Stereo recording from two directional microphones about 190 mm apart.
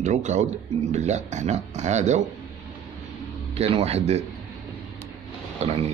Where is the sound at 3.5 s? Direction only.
30° right (ahead or behind).